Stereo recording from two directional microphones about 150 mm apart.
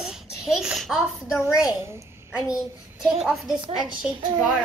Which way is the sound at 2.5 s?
Centre (ahead or behind).